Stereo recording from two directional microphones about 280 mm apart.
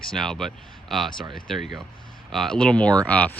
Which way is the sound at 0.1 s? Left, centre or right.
Centre.